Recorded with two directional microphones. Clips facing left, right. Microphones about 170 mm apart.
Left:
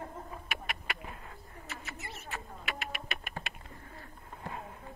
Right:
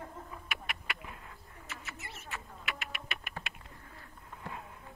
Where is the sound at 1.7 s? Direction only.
35° left (ahead or behind).